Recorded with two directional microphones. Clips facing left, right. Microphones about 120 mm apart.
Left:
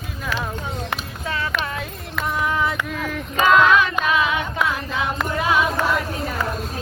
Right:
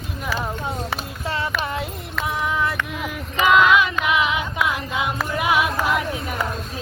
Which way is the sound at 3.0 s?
10° right (ahead or behind).